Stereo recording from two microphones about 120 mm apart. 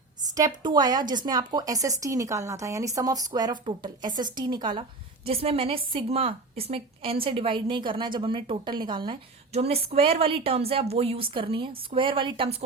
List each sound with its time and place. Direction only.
0.2 s a woman's voice: 30° right (ahead or behind)
9.5 s a woman's voice: 60° right (ahead or behind)